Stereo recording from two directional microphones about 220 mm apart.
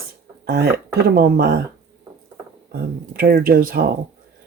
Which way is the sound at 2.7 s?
45° right (ahead or behind).